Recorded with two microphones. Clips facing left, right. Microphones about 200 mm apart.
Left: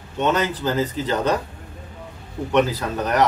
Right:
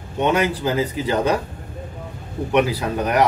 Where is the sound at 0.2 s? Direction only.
10° right (ahead or behind).